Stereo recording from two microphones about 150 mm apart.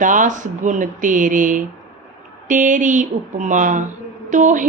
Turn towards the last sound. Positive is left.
turn(degrees=-55)  # may be behind; listen again after turning